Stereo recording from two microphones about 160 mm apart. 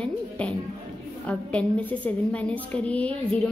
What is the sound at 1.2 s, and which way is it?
A woman's voice, 10° left (ahead or behind).